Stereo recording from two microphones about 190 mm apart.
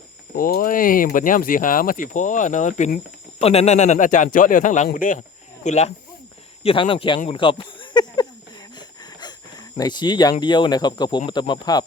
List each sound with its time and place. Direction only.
0.3 s speech: 50° left (ahead or behind); by 8.3 s 20° left (ahead or behind)
9.7 s speech: 20° left (ahead or behind)